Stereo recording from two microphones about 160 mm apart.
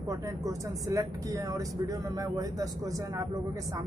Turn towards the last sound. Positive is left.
turn(degrees=-20)  # may be behind; listen again after turning